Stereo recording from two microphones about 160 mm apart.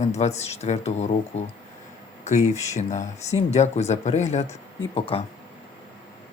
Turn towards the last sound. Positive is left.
turn(degrees=35)  # may be behind; listen again after turning